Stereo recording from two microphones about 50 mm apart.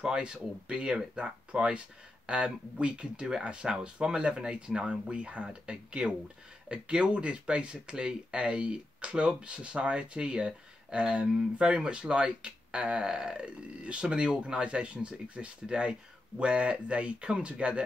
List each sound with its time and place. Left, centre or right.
0.0 s speech: centre